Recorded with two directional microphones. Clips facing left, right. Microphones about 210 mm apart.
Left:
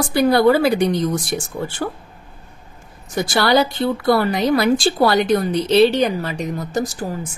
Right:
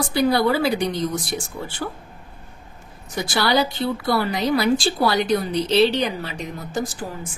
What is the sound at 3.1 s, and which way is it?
A woman's voice, 55° left (ahead or behind).